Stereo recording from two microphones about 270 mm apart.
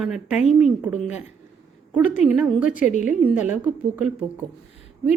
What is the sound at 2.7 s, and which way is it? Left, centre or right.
Speech, left.